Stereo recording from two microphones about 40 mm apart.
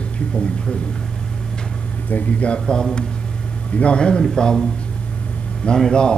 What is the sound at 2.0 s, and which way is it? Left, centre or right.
Speech, left.